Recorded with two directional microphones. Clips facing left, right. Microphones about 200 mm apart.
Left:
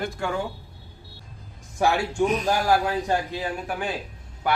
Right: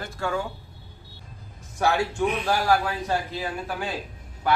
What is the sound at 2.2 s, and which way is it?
Speech, 40° left (ahead or behind).